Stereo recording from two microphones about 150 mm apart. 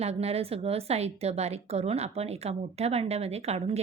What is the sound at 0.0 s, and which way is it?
A woman's voice, 45° right (ahead or behind).